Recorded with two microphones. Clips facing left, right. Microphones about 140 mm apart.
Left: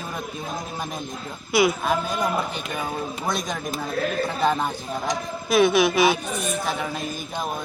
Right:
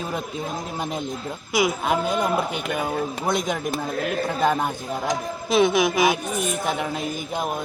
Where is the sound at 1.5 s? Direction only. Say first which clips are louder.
Left 1 dB; 15° right (ahead or behind).